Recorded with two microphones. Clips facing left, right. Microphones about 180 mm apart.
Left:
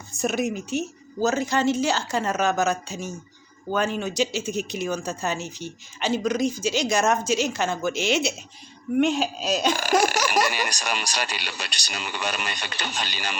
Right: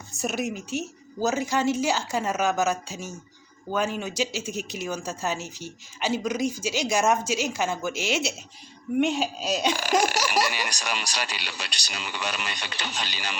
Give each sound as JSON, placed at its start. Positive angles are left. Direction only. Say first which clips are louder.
{"t": 0.2, "sound": "speech", "louder": "left 4 dB", "side_deg": -5}
{"t": 9.6, "sound": "speech", "louder": "left 2 dB", "side_deg": 50}